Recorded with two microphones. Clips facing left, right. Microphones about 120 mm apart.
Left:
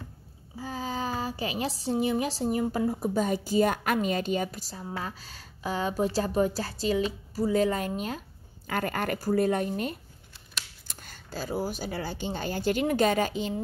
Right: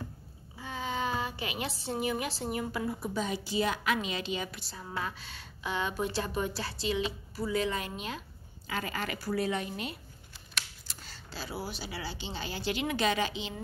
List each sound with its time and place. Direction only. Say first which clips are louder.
0.6 s a woman's voice: left 2 dB; 35° left (ahead or behind)